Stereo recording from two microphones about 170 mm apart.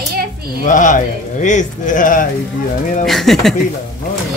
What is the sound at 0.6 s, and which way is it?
Speech, 50° left (ahead or behind).